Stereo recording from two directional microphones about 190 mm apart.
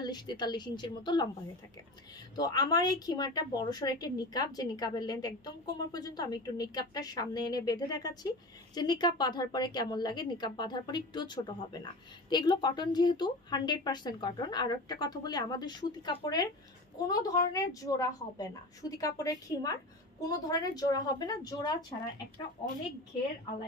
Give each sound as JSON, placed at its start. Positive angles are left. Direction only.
{"t": 0.0, "sound": "a woman's voice", "side_deg": 20}
{"t": 2.3, "sound": "a woman's voice", "side_deg": 20}